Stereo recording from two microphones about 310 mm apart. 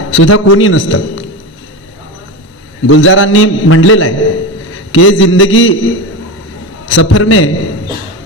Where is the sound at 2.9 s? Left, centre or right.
Left.